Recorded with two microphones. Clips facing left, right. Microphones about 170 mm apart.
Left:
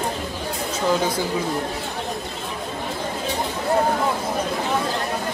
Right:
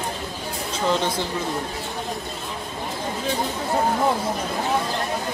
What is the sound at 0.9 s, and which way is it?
Speech, 10° left (ahead or behind).